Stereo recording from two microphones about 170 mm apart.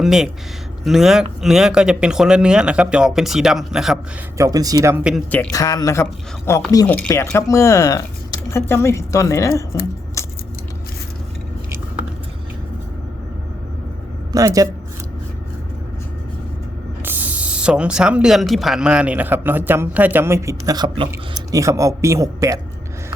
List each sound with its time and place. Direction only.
0.0 s speech: 5° right (ahead or behind)
4.4 s a man's voice: 20° right (ahead or behind)
5.5 s speech: 20° left (ahead or behind)
10.2 s a sound: 15° left (ahead or behind)
14.3 s a man's voice: 20° right (ahead or behind)
17.0 s speech: 10° right (ahead or behind); by 21.4 s 30° right (ahead or behind)
21.5 s a man's voice: 20° right (ahead or behind)